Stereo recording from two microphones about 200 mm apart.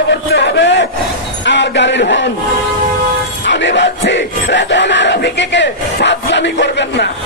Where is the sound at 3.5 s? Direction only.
65° left (ahead or behind).